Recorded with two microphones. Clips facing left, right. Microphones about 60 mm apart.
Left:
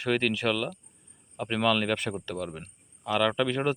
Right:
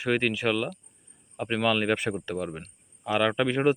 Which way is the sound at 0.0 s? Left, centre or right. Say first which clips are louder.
Right 1 dB; centre.